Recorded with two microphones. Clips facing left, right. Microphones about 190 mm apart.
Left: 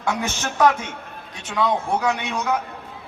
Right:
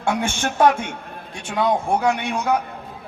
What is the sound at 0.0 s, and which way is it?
Speech, 30° right (ahead or behind).